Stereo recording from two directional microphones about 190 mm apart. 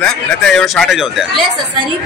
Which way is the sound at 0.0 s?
5° left (ahead or behind).